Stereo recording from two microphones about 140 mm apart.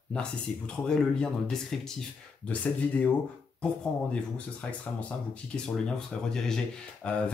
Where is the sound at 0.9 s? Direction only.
5° left (ahead or behind).